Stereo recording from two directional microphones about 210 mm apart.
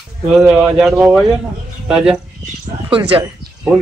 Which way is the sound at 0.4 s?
5° right (ahead or behind).